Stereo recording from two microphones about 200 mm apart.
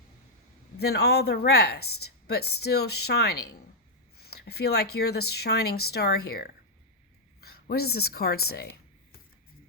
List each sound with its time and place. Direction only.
0.8 s a woman's voice: 55° left (ahead or behind)